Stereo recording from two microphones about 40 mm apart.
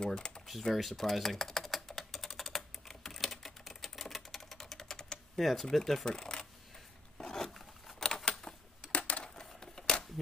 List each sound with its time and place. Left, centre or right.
0.0 s speech: left
0.5 s typing: centre
5.4 s speech: centre
6.0 s speech: centre
7.2 s a sound: centre
8.3 s typing: centre
8.9 s coin: left
9.3 s coin: centre